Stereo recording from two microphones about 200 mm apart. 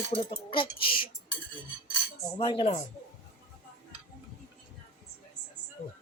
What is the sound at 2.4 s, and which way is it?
Speech, 25° left (ahead or behind).